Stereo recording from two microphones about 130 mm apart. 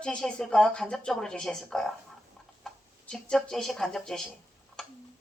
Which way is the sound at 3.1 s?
5° left (ahead or behind).